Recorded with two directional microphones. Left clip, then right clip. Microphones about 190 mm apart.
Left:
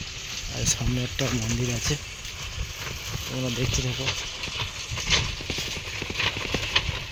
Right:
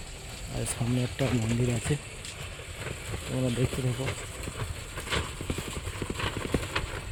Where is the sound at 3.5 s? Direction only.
60° right (ahead or behind).